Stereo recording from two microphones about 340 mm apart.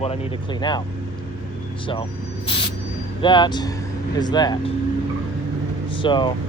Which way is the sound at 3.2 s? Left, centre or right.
Centre.